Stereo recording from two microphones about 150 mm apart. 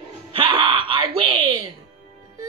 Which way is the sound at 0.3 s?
35° right (ahead or behind).